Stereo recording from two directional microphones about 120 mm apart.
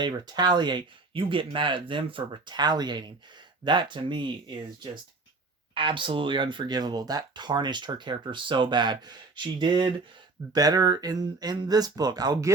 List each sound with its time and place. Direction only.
0.0 s speech: 35° right (ahead or behind)